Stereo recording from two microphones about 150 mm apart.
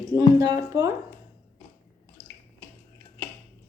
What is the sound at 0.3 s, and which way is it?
Speech, 20° right (ahead or behind).